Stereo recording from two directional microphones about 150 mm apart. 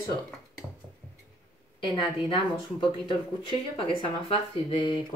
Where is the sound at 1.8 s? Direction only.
30° left (ahead or behind).